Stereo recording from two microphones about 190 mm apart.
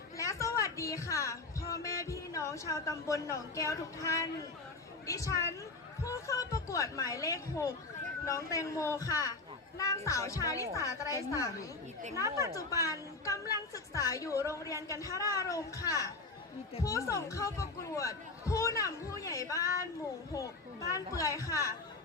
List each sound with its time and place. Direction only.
0.2 s a woman's voice: 15° left (ahead or behind)
12.1 s a woman's voice: 15° right (ahead or behind)
12.5 s speech: 15° left (ahead or behind)
20.9 s speech: 15° left (ahead or behind)